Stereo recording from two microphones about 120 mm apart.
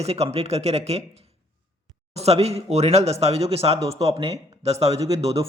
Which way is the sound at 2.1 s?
60° right (ahead or behind).